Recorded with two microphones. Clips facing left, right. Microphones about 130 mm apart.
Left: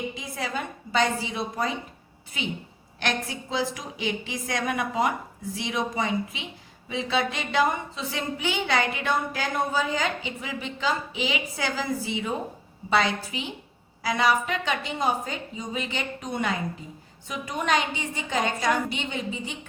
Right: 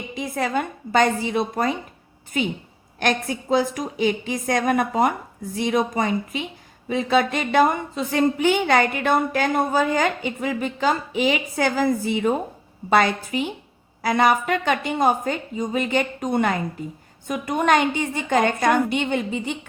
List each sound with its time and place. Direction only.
0.2 s a woman's voice: 55° right (ahead or behind)